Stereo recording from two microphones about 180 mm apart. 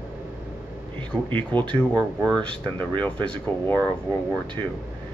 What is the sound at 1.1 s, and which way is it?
Speech, 10° left (ahead or behind).